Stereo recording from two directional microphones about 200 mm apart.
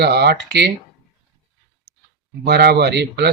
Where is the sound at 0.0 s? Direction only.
55° right (ahead or behind).